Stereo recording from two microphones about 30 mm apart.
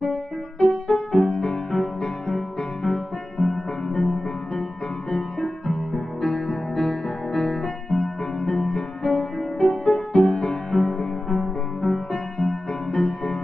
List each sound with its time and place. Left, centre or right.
0.6 s music: centre
9.8 s music: left; by 13.4 s centre